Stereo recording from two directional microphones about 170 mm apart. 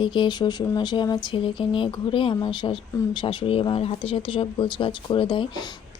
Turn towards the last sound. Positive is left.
turn(degrees=25)  # may be behind; listen again after turning